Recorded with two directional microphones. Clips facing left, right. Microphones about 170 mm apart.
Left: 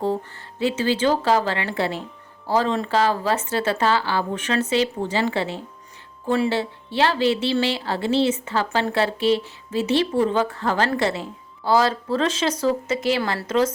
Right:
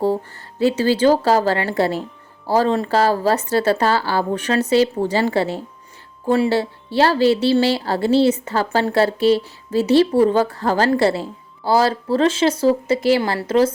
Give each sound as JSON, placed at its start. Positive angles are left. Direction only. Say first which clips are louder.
{"t": 0.6, "sound": "speech", "louder": "right 5 dB", "side_deg": -35}